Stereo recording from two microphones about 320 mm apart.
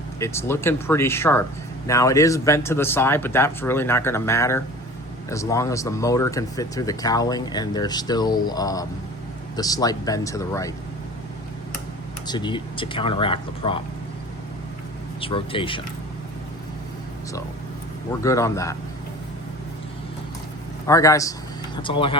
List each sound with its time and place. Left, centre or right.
0.2 s speech: centre
12.3 s speech: centre
15.2 s speech: centre
18.2 s speech: centre
20.8 s speech: centre